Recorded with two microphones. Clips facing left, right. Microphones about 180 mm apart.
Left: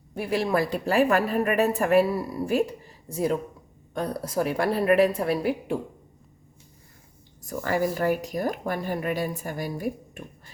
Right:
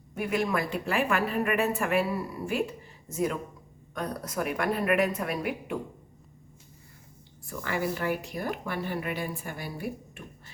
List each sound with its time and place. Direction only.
0.1 s speech: 30° left (ahead or behind)
7.4 s speech: 40° left (ahead or behind)